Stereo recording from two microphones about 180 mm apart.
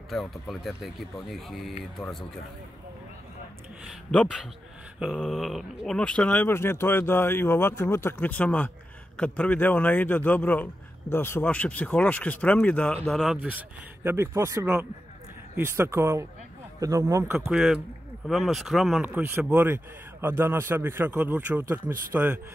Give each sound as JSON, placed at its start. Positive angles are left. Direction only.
{"t": 0.1, "sound": "speech", "side_deg": 0}
{"t": 4.1, "sound": "speech", "side_deg": 5}
{"t": 17.5, "sound": "speech", "side_deg": -5}